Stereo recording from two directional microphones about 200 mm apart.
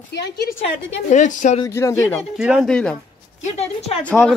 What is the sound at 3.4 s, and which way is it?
Speech, 30° left (ahead or behind).